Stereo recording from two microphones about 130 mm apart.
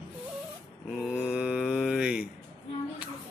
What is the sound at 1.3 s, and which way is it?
Mantra, 5° right (ahead or behind).